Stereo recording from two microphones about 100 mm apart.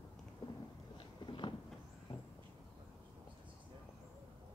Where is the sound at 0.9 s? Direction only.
55° left (ahead or behind).